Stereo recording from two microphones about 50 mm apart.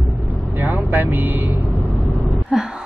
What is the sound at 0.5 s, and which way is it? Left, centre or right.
Vehicle, right.